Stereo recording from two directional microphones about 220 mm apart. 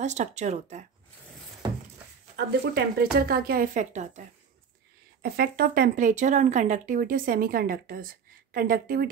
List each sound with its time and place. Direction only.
0.0 s speech: 30° right (ahead or behind)
2.3 s speech: 45° right (ahead or behind)
5.2 s speech: 45° right (ahead or behind)